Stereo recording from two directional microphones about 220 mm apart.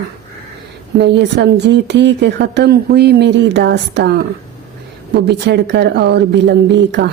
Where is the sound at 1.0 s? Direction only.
50° right (ahead or behind).